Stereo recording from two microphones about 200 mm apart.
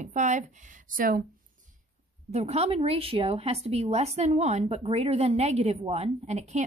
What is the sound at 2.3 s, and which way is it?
A woman's voice, 30° right (ahead or behind).